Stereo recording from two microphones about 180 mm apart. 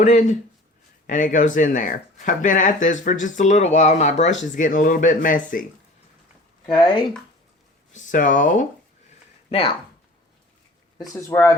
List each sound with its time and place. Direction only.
0.0 s speech: 40° left (ahead or behind)
7.9 s speech: 45° left (ahead or behind)
9.5 s speech: 30° left (ahead or behind)
10.9 s speech: 20° left (ahead or behind)